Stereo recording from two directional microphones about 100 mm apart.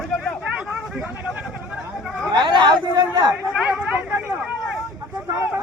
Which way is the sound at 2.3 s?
50° right (ahead or behind).